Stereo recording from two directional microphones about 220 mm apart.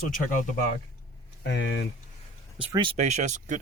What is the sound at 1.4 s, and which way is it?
Speech, 55° left (ahead or behind).